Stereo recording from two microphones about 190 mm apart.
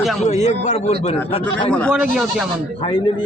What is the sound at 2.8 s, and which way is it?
Speech, 25° left (ahead or behind).